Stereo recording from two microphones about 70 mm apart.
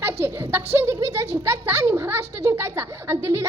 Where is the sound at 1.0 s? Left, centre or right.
Right.